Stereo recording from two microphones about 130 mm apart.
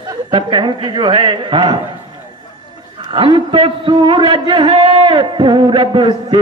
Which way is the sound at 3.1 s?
40° right (ahead or behind).